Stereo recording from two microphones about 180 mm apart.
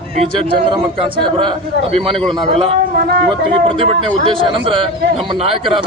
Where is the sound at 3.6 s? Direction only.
30° right (ahead or behind).